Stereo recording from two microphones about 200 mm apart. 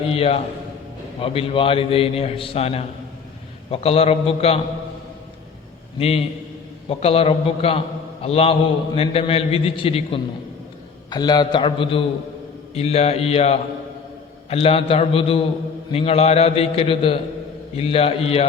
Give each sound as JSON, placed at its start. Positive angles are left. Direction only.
{"t": 0.1, "sound": "a man's voice", "side_deg": 30}
{"t": 6.0, "sound": "a man's voice", "side_deg": 30}